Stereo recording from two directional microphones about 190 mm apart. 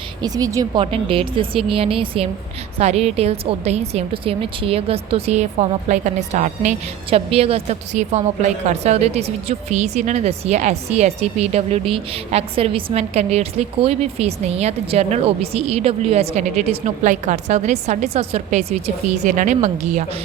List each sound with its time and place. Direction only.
0.2 s a woman's voice: 20° right (ahead or behind); by 20.1 s 35° right (ahead or behind)